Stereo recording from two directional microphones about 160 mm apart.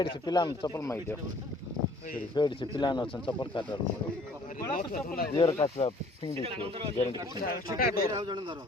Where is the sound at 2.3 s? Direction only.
30° left (ahead or behind).